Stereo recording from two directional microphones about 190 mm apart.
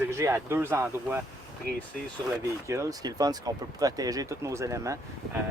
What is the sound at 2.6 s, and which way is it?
Speech, 15° right (ahead or behind).